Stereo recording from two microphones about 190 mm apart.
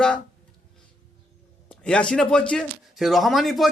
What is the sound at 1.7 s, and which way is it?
Speech, 5° left (ahead or behind).